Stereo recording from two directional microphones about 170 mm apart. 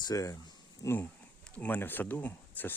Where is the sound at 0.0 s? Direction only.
20° left (ahead or behind).